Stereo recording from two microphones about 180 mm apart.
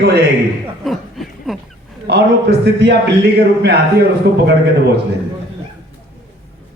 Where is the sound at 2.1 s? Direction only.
65° right (ahead or behind).